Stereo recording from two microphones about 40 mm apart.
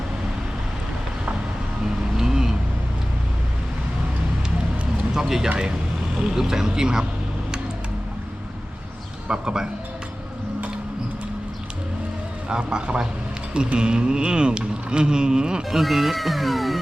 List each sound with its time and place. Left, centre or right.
2.1 s vehicle: centre
5.1 s a sound: centre
6.3 s speech: centre
9.2 s speech: right
12.5 s a sound: right
15.7 s speech: centre